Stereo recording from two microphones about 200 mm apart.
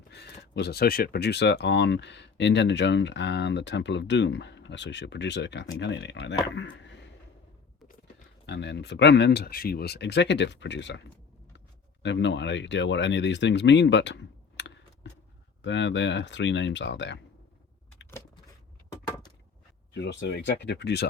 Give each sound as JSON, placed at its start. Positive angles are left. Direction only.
{"t": 0.1, "sound": "speech", "side_deg": 55}
{"t": 8.4, "sound": "speech", "side_deg": 60}
{"t": 18.9, "sound": "a sound", "side_deg": 20}
{"t": 19.9, "sound": "speech", "side_deg": 60}